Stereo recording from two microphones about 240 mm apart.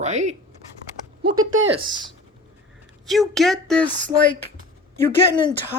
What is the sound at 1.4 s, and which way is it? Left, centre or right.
Speech, right.